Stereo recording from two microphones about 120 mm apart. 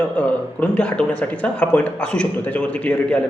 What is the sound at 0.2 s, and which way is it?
Speech, 10° left (ahead or behind).